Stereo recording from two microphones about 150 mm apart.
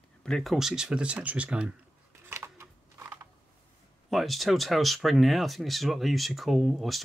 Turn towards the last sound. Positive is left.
turn(degrees=0)  # may be behind; listen again after turning